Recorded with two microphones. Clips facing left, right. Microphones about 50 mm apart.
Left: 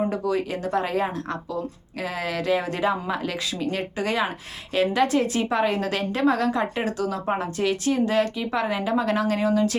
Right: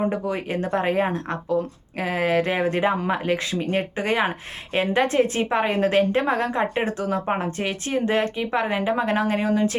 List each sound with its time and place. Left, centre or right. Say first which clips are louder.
0.1 s a woman's voice: left 1 dB; right